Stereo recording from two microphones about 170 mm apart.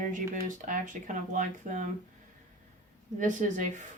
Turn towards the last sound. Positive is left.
turn(degrees=-50)  # may be behind; listen again after turning